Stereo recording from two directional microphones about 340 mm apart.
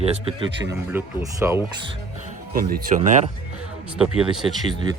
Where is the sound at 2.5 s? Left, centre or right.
Right.